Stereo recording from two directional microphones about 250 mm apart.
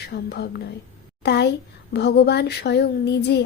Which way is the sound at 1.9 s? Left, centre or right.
Left.